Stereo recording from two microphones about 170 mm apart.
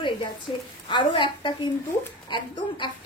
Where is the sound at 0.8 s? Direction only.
30° left (ahead or behind).